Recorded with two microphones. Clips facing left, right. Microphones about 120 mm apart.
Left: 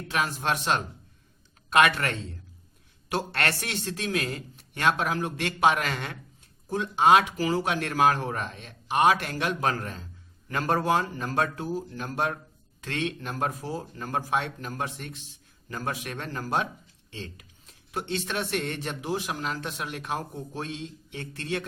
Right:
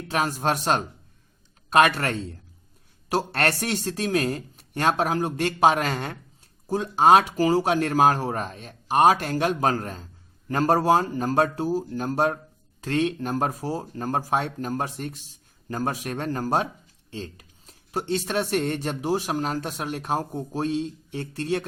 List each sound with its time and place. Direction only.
0.1 s speech: 40° right (ahead or behind)